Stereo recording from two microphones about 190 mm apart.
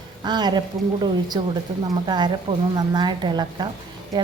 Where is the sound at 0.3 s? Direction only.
20° right (ahead or behind).